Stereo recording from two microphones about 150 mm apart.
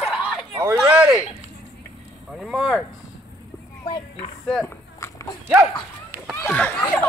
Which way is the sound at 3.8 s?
30° left (ahead or behind).